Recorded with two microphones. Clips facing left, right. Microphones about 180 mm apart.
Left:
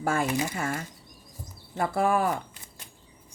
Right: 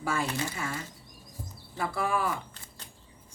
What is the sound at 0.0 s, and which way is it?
A woman's voice, 50° left (ahead or behind).